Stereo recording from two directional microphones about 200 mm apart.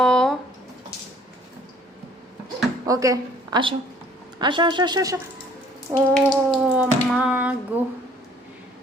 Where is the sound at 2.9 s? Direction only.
15° right (ahead or behind).